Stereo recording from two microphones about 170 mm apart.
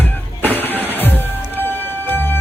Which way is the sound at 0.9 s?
10° left (ahead or behind).